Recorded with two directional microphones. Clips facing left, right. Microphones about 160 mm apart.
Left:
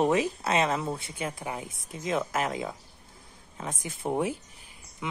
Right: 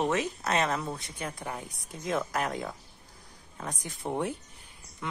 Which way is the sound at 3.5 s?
5° left (ahead or behind).